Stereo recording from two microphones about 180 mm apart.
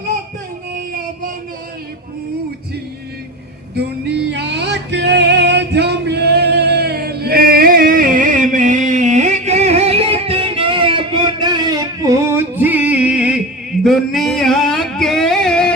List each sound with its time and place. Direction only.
3.8 s music: 70° right (ahead or behind); by 15.7 s 5° left (ahead or behind)